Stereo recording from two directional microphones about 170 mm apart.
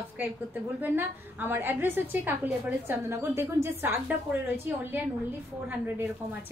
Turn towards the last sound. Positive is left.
turn(degrees=-10)  # may be behind; listen again after turning